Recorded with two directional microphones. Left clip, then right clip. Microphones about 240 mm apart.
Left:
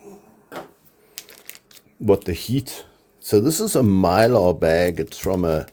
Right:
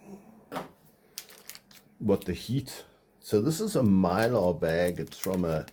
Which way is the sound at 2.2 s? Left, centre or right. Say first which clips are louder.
Left 9 dB; left.